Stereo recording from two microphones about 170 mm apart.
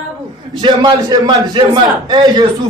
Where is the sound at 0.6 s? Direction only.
25° right (ahead or behind).